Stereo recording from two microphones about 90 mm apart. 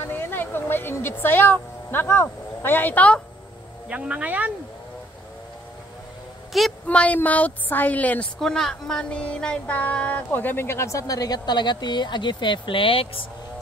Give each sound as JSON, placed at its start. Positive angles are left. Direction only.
{"t": 0.1, "sound": "speech", "side_deg": 25}
{"t": 3.9, "sound": "speech", "side_deg": -15}
{"t": 6.5, "sound": "a woman's voice", "side_deg": 0}
{"t": 6.9, "sound": "a woman's voice", "side_deg": 15}
{"t": 8.4, "sound": "speech", "side_deg": 5}